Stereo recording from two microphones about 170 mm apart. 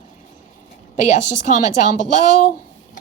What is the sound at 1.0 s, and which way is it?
Speech, 45° left (ahead or behind).